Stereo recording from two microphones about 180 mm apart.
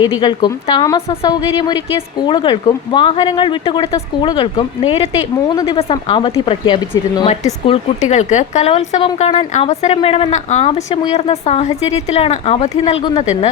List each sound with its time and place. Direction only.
0.0 s speech: 25° left (ahead or behind)
7.3 s a woman's voice: 40° left (ahead or behind)
13.0 s speech: 25° left (ahead or behind)